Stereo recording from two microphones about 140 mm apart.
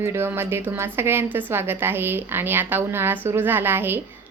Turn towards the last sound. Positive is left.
turn(degrees=-15)  # may be behind; listen again after turning